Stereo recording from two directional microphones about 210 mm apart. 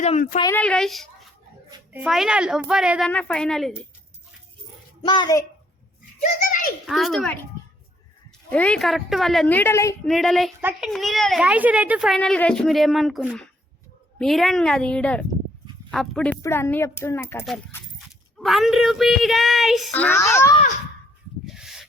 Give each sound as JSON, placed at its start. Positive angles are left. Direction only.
{"t": 0.0, "sound": "a child's voice", "side_deg": 35}
{"t": 0.5, "sound": "a child's voice", "side_deg": 5}
{"t": 5.0, "sound": "a woman's voice", "side_deg": 20}
{"t": 6.2, "sound": "a child's voice", "side_deg": 40}
{"t": 6.8, "sound": "a child's voice", "side_deg": 0}
{"t": 8.4, "sound": "a child's voice", "side_deg": 5}
{"t": 10.1, "sound": "a child's voice", "side_deg": 0}
{"t": 18.3, "sound": "a child's voice", "side_deg": 0}
{"t": 21.4, "sound": "a sound", "side_deg": 0}